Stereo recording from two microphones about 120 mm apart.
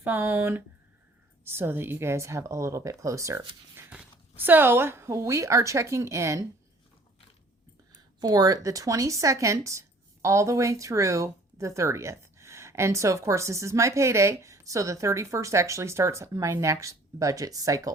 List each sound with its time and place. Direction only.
0.0 s speech: 20° right (ahead or behind)
8.2 s speech: 30° right (ahead or behind)